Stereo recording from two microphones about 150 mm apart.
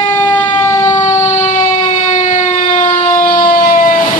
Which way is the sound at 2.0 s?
55° left (ahead or behind).